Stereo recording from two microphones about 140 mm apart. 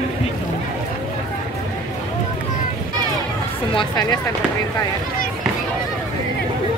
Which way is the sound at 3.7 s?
35° left (ahead or behind).